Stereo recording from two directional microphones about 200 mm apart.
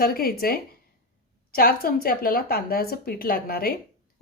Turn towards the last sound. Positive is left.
turn(degrees=50)  # may be behind; listen again after turning